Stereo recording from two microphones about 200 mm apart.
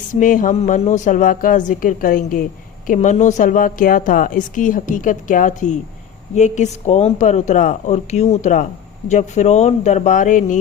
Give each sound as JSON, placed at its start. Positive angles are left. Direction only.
{"t": 0.1, "sound": "a woman's voice", "side_deg": 40}